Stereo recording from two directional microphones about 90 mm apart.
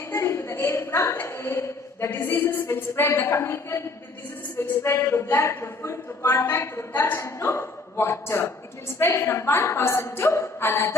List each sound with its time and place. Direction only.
0.1 s a woman's voice: 25° left (ahead or behind)